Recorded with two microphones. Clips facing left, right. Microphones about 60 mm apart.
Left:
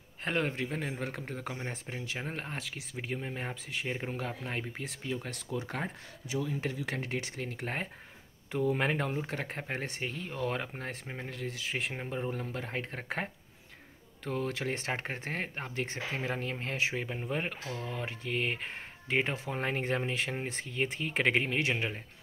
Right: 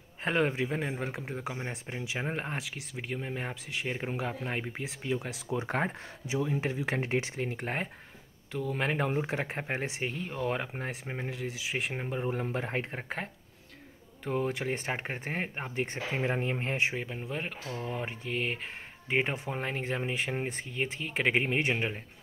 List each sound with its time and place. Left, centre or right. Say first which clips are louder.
0.2 s speech: right 4 dB; centre
1.4 s speech: right 2 dB; centre; by 2.5 s right
2.5 s speech: right 2 dB; centre
5.6 s speech: right 8 dB; right
7.5 s speech: right 2 dB; centre
8.5 s speech: left 2 dB; centre
9.1 s speech: right 4 dB; centre
12.3 s speech: right 4 dB; right
14.2 s speech: right 3 dB; centre
16.9 s speech: left 1 dB; centre
17.7 s speech: right 2 dB; centre
18.3 s speech: left 1 dB; centre
19.0 s speech: right 1 dB; centre